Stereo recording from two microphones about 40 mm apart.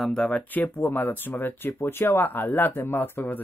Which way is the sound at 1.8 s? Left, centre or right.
Left.